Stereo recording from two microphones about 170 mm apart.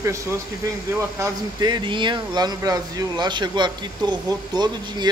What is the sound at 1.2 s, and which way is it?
Speech, 25° right (ahead or behind).